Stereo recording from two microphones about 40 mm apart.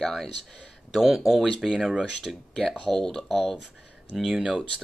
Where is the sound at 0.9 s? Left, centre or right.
Centre.